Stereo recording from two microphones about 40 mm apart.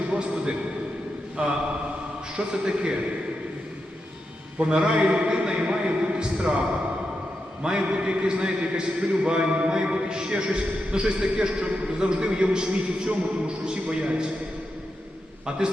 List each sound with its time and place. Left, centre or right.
0.1 s a man's voice: right
2.3 s a man's voice: right
4.5 s a man's voice: right
7.6 s a man's voice: right
15.4 s a man's voice: centre